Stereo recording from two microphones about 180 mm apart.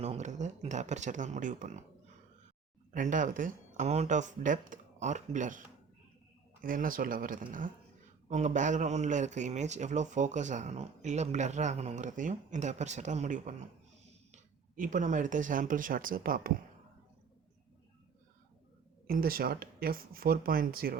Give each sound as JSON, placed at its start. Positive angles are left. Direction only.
{"t": 0.0, "sound": "a man's voice", "side_deg": -40}
{"t": 2.9, "sound": "a man's voice", "side_deg": -45}
{"t": 19.0, "sound": "speech", "side_deg": -55}